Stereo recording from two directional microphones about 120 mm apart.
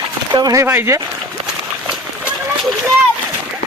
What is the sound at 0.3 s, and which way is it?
Speech, 35° right (ahead or behind).